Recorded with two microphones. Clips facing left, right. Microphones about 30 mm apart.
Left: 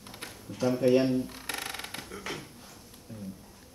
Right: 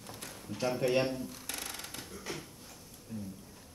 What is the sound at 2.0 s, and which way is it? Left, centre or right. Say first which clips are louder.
Speech: left 4 dB; left.